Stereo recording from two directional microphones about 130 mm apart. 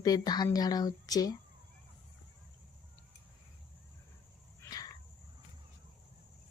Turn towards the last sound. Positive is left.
turn(degrees=30)  # may be behind; listen again after turning